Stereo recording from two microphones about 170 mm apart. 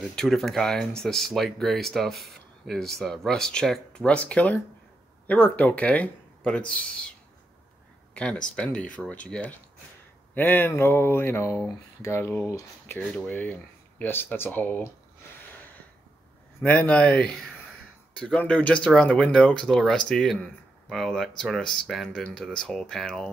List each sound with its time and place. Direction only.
0.1 s speech: 5° left (ahead or behind)
8.1 s speech: 5° left (ahead or behind)
13.0 s speech: centre (ahead or behind)
16.6 s speech: 10° left (ahead or behind)